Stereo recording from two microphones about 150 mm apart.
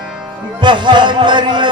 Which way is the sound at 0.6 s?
30° right (ahead or behind).